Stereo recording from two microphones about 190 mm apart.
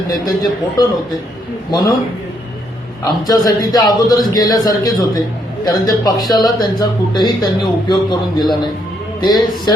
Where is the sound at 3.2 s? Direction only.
20° left (ahead or behind).